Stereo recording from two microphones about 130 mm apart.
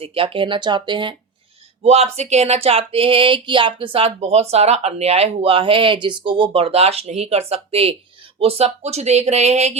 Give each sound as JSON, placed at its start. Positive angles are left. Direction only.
{"t": 0.0, "sound": "speech", "side_deg": -45}
{"t": 1.8, "sound": "speech", "side_deg": -55}